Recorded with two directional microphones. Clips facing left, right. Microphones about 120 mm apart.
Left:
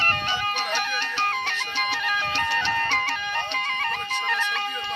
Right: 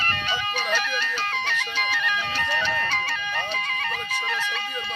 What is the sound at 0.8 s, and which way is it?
Music, 60° left (ahead or behind).